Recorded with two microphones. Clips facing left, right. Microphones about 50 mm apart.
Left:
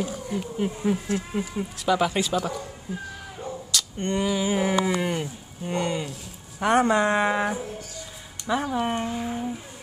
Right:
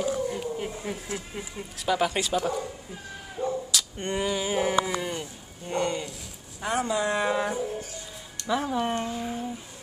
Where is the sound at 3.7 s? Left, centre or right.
Centre.